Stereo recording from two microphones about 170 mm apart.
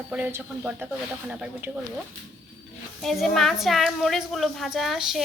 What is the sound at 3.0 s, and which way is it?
A woman's voice, centre (ahead or behind).